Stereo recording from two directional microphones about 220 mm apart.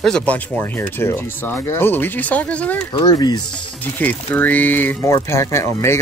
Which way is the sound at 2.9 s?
20° left (ahead or behind).